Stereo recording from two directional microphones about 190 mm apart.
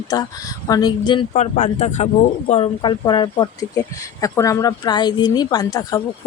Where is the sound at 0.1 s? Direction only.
20° left (ahead or behind).